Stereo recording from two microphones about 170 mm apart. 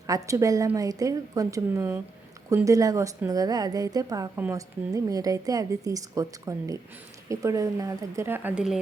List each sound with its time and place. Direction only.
0.1 s a woman's voice: 20° right (ahead or behind)